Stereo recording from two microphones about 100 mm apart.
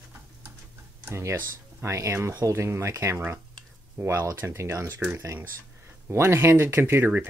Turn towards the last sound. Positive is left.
turn(degrees=-20)  # may be behind; listen again after turning